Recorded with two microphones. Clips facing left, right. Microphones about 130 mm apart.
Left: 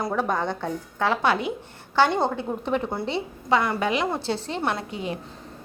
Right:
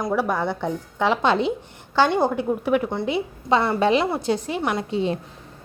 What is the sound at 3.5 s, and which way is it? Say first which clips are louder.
A woman's voice: right 4 dB; 25° right (ahead or behind).